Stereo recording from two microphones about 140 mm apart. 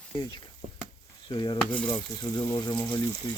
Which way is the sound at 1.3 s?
35° left (ahead or behind).